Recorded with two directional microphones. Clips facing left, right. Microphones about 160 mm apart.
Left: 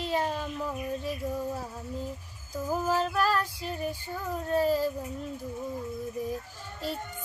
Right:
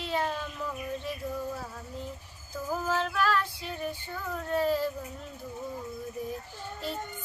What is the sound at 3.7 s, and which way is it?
Female singing, 5° left (ahead or behind).